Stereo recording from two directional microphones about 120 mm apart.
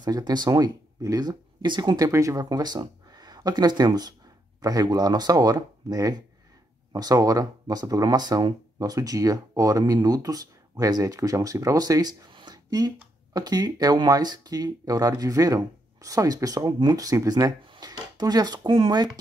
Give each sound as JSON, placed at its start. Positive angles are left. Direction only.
{"t": 0.0, "sound": "speech", "side_deg": -35}
{"t": 2.0, "sound": "speech", "side_deg": -25}